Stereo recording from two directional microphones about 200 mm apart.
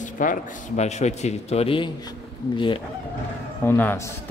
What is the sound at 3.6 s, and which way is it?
Speech, 10° left (ahead or behind).